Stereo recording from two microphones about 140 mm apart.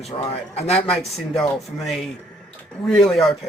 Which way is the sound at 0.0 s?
45° left (ahead or behind).